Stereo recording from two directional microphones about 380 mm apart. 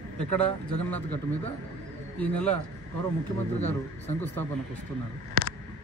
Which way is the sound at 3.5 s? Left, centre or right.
Centre.